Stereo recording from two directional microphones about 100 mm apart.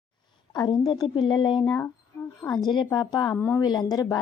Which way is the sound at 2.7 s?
45° left (ahead or behind).